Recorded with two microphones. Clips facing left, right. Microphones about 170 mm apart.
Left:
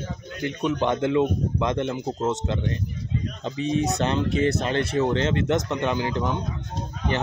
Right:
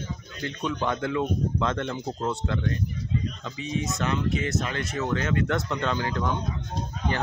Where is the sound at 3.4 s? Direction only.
35° left (ahead or behind); by 6.3 s 20° left (ahead or behind).